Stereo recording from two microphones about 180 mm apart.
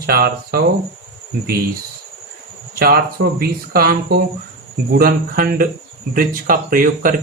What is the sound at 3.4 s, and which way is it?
Speech, 60° right (ahead or behind).